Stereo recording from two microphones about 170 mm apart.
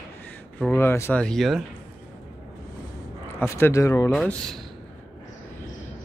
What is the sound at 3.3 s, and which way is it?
Speech, 15° left (ahead or behind).